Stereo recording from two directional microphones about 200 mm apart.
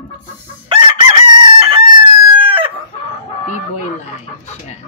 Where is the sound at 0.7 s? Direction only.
25° right (ahead or behind).